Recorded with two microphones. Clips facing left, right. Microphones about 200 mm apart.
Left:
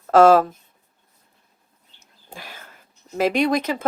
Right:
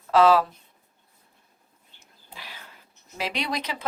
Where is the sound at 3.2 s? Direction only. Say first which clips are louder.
Left 11 dB; 50° left (ahead or behind).